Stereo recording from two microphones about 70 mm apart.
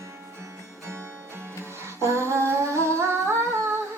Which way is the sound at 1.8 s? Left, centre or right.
Right.